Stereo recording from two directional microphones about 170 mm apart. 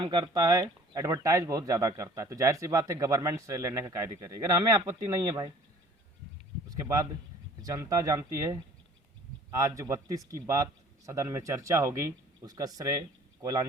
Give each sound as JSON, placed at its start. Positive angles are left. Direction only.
{"t": 0.0, "sound": "speech", "side_deg": -25}
{"t": 6.7, "sound": "speech", "side_deg": -20}